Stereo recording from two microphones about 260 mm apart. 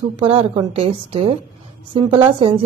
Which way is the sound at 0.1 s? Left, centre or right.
Right.